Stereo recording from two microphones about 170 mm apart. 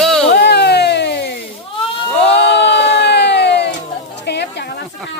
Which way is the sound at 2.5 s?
85° left.